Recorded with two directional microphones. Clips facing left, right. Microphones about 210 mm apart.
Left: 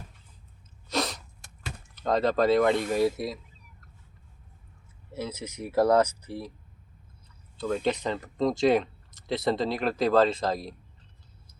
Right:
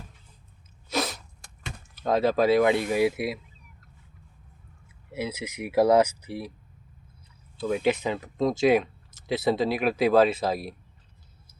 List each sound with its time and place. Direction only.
0.9 s sneeze: 5° right (ahead or behind)
2.0 s speech: 5° right (ahead or behind)
5.1 s speech: 10° right (ahead or behind)
7.6 s speech: 5° right (ahead or behind)